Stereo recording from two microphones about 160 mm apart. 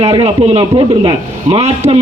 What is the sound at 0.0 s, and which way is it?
A man's voice, 35° right (ahead or behind).